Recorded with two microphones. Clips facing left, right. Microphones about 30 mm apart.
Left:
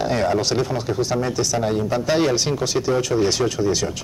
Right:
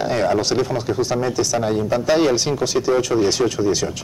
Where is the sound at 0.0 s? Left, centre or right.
Centre.